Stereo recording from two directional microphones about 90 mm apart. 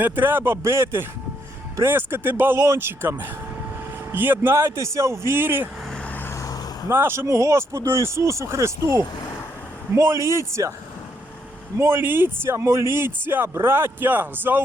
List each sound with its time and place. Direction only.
0.0 s speech: 25° right (ahead or behind)
6.1 s vehicle: 25° left (ahead or behind)
6.8 s speech: 25° right (ahead or behind)
11.8 s speech: 25° right (ahead or behind)